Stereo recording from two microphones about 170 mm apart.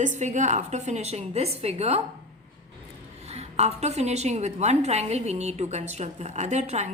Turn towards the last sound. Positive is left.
turn(degrees=-40)  # may be behind; listen again after turning